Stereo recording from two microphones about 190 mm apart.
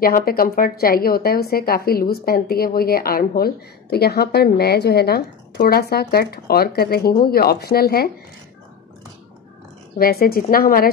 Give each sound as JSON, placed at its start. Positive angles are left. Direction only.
{"t": 0.0, "sound": "speech", "side_deg": 50}
{"t": 9.9, "sound": "speech", "side_deg": 50}